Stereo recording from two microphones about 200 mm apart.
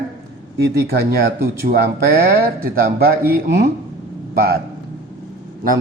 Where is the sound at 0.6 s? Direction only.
50° right (ahead or behind).